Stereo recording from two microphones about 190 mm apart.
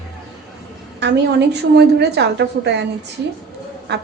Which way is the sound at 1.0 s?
65° right (ahead or behind).